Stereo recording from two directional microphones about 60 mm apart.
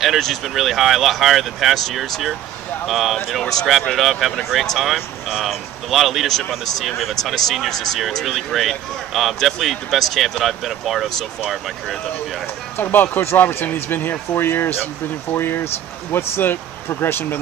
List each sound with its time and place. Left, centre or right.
0.0 s speech: centre
12.7 s speech: left